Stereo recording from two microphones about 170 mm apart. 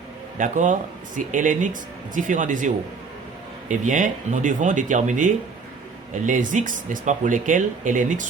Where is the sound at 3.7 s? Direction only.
50° right (ahead or behind).